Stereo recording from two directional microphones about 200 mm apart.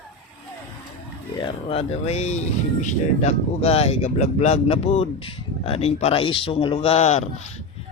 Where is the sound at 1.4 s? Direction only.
30° left (ahead or behind).